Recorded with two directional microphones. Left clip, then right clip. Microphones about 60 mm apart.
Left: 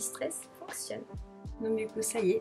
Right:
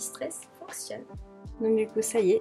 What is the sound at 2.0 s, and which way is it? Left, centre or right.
Speech, right.